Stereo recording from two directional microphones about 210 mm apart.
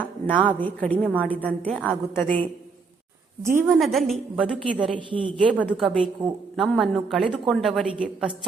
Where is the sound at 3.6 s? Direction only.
Centre (ahead or behind).